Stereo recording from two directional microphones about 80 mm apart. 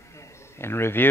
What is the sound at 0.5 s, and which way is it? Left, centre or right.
Speech, left.